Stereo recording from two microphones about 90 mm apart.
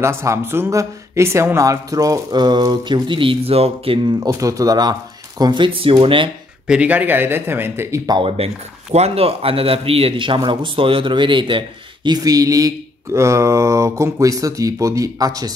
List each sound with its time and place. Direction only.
0.0 s speech: 30° right (ahead or behind); by 4.1 s 90° right
4.2 s speech: 40° right (ahead or behind)
5.4 s speech: 65° right (ahead or behind)
6.7 s speech: 15° right (ahead or behind)
8.2 s speech: 90° right; by 15.5 s 45° right (ahead or behind)